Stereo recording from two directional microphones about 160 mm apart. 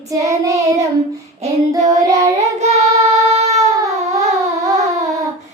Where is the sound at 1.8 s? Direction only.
45° right (ahead or behind).